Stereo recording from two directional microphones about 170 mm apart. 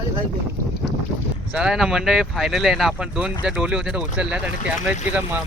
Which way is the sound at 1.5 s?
5° right (ahead or behind).